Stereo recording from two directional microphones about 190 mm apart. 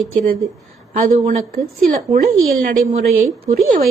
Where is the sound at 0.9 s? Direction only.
40° right (ahead or behind).